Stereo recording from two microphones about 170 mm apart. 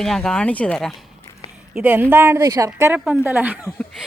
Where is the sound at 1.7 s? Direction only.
10° right (ahead or behind).